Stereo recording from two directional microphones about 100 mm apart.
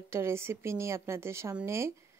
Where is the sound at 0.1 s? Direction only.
25° right (ahead or behind).